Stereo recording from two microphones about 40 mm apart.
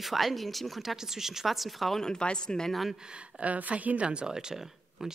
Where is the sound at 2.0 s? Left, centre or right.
Centre.